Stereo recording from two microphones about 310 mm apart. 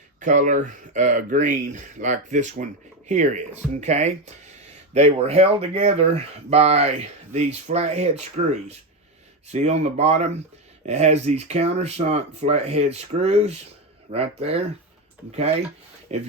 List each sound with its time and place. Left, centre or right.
0.2 s speech: right
16.1 s speech: right